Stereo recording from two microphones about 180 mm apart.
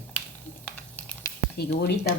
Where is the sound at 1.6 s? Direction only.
65° left (ahead or behind).